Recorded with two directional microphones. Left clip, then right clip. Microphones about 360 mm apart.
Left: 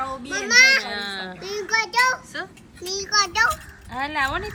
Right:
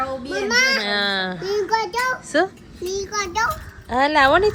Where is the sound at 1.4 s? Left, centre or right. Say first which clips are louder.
Right 3 dB; centre.